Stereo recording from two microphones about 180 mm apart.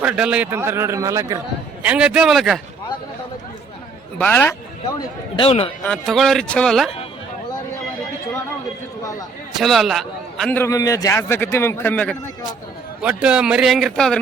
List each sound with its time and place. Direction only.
0.0 s a man's voice: 5° right (ahead or behind)
4.2 s a man's voice: 10° left (ahead or behind)
4.9 s speech: 30° left (ahead or behind)
5.8 s speech: centre (ahead or behind)
9.6 s a man's voice: centre (ahead or behind)
13.0 s speech: 5° right (ahead or behind)